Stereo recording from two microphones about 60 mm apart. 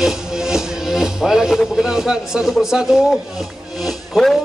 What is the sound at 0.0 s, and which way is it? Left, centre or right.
Speech, centre.